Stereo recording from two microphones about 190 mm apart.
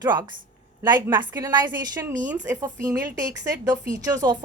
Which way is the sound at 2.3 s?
10° right (ahead or behind).